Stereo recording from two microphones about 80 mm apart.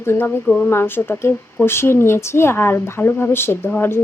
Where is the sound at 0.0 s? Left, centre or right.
Left.